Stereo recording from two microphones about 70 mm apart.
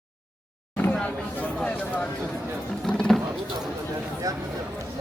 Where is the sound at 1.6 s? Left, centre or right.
Left.